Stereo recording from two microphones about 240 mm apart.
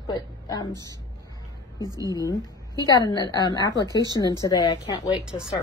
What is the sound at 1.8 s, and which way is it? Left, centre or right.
Speech, centre.